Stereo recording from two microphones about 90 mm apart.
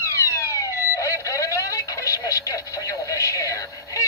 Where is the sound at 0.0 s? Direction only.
30° left (ahead or behind).